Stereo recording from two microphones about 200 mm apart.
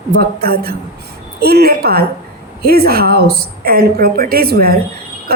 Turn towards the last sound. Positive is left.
turn(degrees=-50)  # may be behind; listen again after turning